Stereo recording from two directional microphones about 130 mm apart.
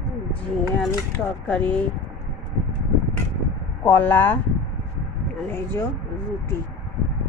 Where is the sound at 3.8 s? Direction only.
15° left (ahead or behind).